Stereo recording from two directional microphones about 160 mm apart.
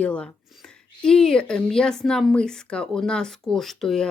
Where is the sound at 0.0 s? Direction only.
5° left (ahead or behind).